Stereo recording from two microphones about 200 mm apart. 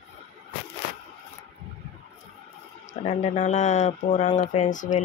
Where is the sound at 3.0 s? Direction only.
35° left (ahead or behind).